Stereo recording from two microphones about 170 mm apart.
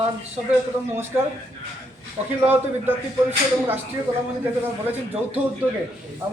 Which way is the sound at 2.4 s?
10° right (ahead or behind).